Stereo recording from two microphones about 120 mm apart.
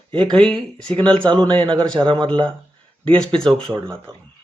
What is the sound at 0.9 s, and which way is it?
Speech, 45° right (ahead or behind).